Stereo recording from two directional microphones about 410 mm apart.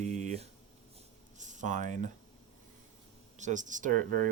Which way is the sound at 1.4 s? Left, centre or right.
Centre.